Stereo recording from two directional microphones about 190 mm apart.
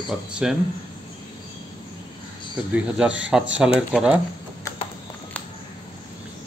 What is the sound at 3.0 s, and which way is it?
Speech, 5° right (ahead or behind).